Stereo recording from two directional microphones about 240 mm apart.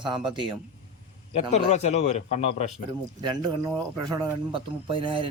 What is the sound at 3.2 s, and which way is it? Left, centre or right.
Speech, centre.